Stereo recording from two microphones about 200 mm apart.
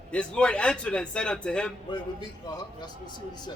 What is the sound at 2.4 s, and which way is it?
Speech, 20° left (ahead or behind).